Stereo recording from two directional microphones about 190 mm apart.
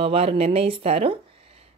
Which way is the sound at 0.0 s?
30° right (ahead or behind).